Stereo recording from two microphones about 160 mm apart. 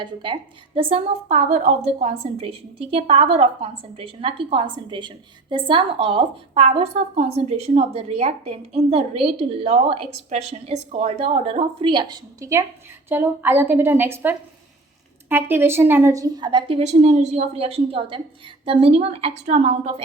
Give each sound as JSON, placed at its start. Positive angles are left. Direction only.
{"t": 0.0, "sound": "a woman's voice", "side_deg": -30}